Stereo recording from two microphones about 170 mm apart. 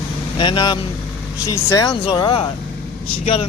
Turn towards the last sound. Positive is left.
turn(degrees=40)  # may be behind; listen again after turning